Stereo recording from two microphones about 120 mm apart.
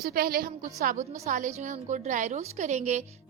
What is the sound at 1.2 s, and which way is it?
A woman's voice, 90° right.